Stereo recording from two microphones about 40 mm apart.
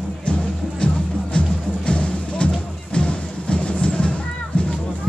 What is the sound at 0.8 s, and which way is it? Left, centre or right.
Music, left.